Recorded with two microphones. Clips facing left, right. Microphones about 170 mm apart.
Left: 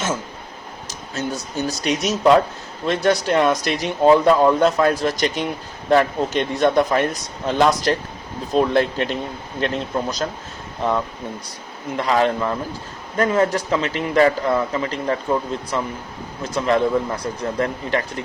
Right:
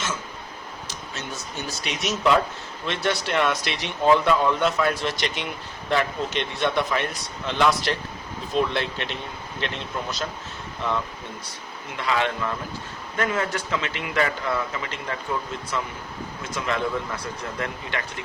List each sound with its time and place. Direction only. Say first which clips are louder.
1.1 s speech: left 10 dB; 40° left (ahead or behind)
11.9 s speech: left 6 dB; 40° left (ahead or behind)